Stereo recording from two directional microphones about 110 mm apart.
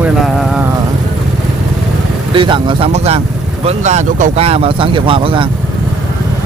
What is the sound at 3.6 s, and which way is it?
Speech, 90° right.